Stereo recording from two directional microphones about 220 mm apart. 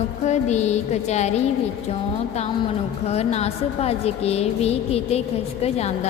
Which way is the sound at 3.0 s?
30° left (ahead or behind).